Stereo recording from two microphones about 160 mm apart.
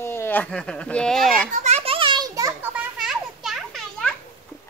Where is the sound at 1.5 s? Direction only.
45° right (ahead or behind); by 2.5 s 20° right (ahead or behind).